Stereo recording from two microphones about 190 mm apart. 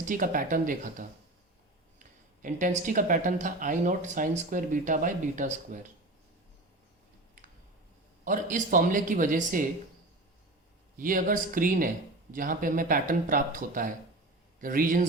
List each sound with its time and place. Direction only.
0.0 s speech: 45° right (ahead or behind)
2.4 s speech: 45° right (ahead or behind)
8.2 s speech: 45° right (ahead or behind)
10.9 s speech: 45° right (ahead or behind)